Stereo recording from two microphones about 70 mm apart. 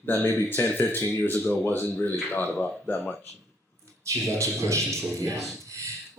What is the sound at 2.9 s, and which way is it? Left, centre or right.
Speech, left.